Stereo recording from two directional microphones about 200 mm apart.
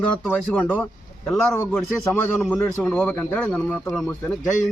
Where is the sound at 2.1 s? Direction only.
10° left (ahead or behind).